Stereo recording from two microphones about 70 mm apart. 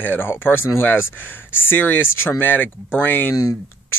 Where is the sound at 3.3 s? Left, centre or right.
Left.